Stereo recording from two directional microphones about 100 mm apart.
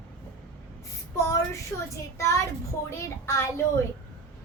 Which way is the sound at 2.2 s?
30° left (ahead or behind).